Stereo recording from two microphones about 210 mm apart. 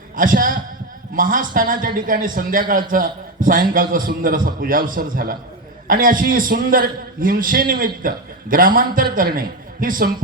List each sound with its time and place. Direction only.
0.2 s a man's voice: 40° right (ahead or behind)